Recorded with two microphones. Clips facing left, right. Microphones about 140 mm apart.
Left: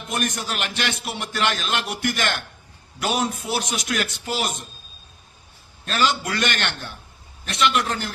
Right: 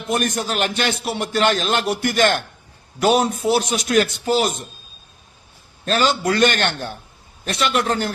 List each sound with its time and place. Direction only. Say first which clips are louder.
0.1 s a man's voice: right 5 dB; 35° right (ahead or behind)
5.8 s a man's voice: right 4 dB; 40° right (ahead or behind)